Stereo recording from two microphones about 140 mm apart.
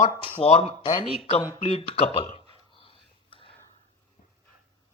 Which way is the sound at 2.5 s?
40° left (ahead or behind).